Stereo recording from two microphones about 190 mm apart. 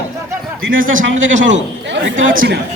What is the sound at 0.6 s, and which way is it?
Speech, 90° right.